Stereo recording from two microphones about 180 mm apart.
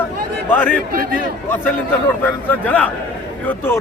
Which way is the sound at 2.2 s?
10° left (ahead or behind).